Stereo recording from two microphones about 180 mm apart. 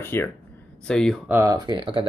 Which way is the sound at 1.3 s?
15° right (ahead or behind).